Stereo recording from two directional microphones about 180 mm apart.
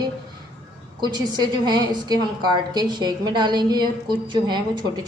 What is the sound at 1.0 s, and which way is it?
A woman's voice, 25° right (ahead or behind).